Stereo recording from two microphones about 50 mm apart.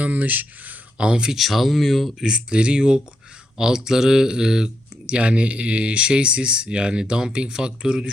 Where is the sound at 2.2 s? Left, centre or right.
Centre.